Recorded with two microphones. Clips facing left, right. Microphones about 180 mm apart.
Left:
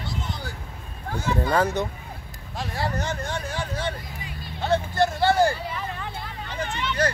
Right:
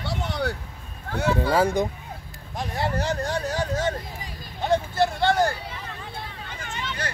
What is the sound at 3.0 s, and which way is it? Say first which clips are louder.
Speech: right 3 dB; 35° right (ahead or behind).